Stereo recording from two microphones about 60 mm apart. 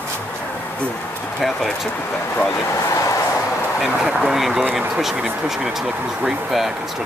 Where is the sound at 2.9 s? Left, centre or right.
Left.